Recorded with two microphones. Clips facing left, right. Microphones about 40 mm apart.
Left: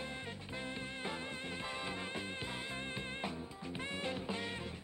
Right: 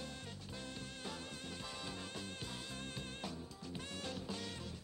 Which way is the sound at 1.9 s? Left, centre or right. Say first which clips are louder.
Left 5 dB; left.